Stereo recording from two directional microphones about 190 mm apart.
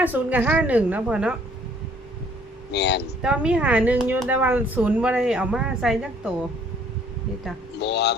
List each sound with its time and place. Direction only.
0.0 s speech: 10° right (ahead or behind)
2.7 s speech: 60° left (ahead or behind)
3.2 s speech: 5° right (ahead or behind)
7.8 s speech: 60° left (ahead or behind)